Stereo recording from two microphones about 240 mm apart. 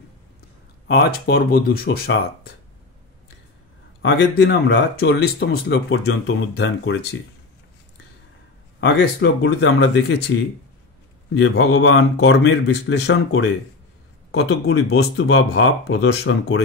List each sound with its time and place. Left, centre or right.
0.8 s speech: left
4.0 s speech: left
8.8 s speech: left
11.3 s speech: left